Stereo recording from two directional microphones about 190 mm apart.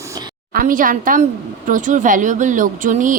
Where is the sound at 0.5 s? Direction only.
45° right (ahead or behind).